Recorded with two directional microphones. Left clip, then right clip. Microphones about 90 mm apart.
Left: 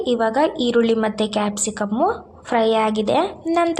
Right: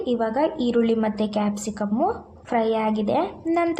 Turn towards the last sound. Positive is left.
turn(degrees=25)  # may be behind; listen again after turning